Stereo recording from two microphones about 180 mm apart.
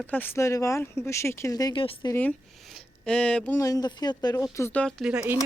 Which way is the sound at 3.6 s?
20° left (ahead or behind).